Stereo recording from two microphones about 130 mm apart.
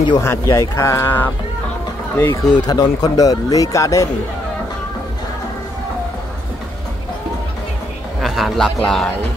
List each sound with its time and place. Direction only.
0.2 s speech: 20° left (ahead or behind)
2.6 s speech: 30° left (ahead or behind)
8.2 s a man's voice: centre (ahead or behind)